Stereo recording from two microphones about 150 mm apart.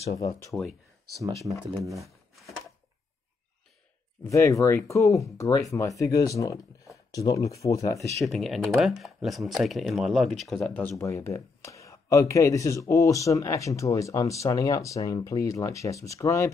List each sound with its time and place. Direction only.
0.2 s speech: 25° left (ahead or behind)
1.8 s speech: 20° right (ahead or behind)
2.0 s a sound: centre (ahead or behind)
4.2 s speech: 20° left (ahead or behind)
8.2 s speech: centre (ahead or behind); by 16.5 s 20° left (ahead or behind)